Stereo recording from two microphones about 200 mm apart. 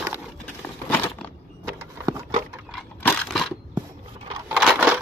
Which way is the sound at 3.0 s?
Centre (ahead or behind).